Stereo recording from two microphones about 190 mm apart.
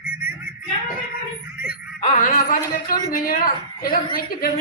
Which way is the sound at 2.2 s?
45° left (ahead or behind).